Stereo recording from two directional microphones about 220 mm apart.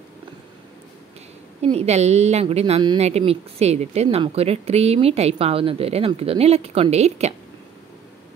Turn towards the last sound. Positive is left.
turn(degrees=-30)  # may be behind; listen again after turning